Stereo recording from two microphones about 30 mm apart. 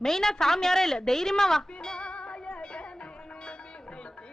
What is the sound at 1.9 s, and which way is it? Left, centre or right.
Music, left.